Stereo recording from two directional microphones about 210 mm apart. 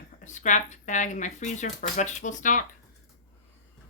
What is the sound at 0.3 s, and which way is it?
Speech, 35° left (ahead or behind).